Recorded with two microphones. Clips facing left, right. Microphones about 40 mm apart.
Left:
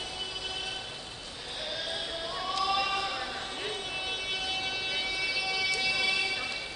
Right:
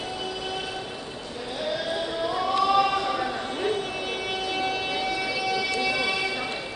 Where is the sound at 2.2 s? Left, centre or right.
Centre.